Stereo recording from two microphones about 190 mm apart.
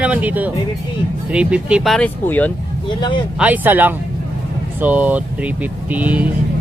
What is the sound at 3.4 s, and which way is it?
Speech, 10° right (ahead or behind).